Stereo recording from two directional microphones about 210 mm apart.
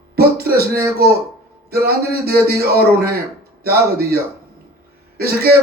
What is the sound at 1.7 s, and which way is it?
Speech, 45° right (ahead or behind).